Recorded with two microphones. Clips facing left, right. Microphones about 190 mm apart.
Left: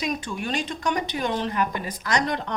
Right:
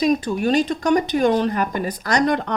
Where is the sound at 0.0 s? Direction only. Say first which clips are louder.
Right 10 dB; 35° right (ahead or behind).